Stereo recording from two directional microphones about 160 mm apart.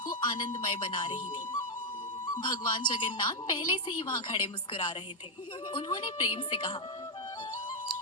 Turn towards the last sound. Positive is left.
turn(degrees=30)  # may be behind; listen again after turning